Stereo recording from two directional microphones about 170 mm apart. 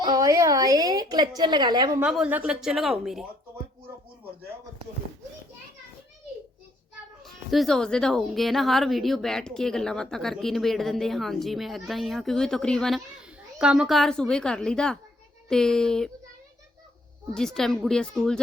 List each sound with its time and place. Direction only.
0.0 s a woman's voice: 25° right (ahead or behind)
2.0 s a woman's voice: 5° right (ahead or behind)
7.3 s a woman's voice: centre (ahead or behind)
17.3 s a woman's voice: 5° left (ahead or behind)